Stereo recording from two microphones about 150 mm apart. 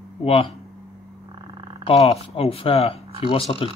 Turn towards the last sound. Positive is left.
turn(degrees=40)  # may be behind; listen again after turning